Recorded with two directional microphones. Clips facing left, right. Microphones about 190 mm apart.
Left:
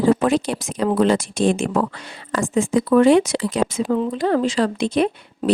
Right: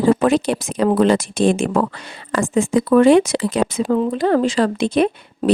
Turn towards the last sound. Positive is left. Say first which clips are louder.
# right 2 dB
turn(degrees=-55)  # may be behind; listen again after turning